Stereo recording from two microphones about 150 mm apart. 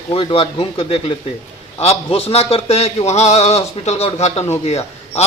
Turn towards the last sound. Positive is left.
turn(degrees=45)  # may be behind; listen again after turning